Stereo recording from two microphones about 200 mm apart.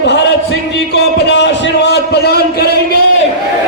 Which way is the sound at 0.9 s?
60° left (ahead or behind).